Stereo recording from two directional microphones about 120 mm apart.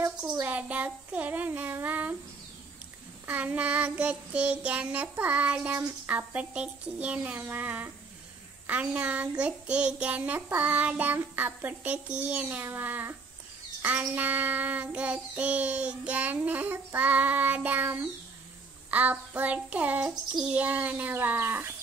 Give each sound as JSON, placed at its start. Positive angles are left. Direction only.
{"t": 0.2, "sound": "child singing", "side_deg": -15}
{"t": 3.3, "sound": "child singing", "side_deg": -15}